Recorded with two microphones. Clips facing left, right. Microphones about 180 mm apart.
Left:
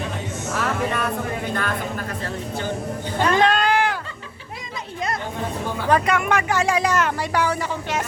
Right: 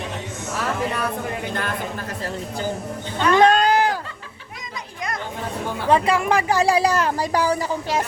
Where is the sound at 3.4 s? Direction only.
40° right (ahead or behind).